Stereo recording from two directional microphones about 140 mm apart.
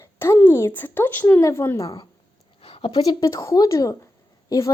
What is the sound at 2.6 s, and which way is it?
Speech, 40° left (ahead or behind).